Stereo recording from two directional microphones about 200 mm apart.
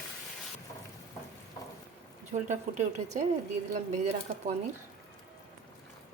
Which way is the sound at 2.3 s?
35° right (ahead or behind).